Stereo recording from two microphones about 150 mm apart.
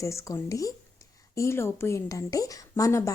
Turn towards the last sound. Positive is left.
turn(degrees=20)  # may be behind; listen again after turning